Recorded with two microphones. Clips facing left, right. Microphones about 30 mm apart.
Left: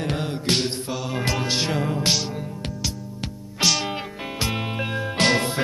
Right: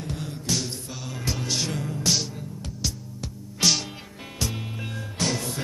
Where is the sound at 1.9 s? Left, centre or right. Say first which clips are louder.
Left 3 dB; left.